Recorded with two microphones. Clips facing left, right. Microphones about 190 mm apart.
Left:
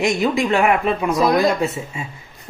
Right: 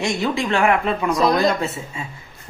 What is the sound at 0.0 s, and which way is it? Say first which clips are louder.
Speech: left 3 dB; 20° left (ahead or behind).